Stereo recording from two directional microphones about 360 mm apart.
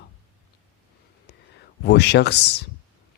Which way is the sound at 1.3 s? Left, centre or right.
Left.